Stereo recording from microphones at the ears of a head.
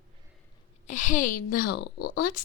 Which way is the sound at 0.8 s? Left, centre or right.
Left.